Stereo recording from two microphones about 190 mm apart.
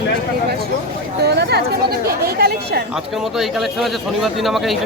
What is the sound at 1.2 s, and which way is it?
A woman's voice, 60° right (ahead or behind).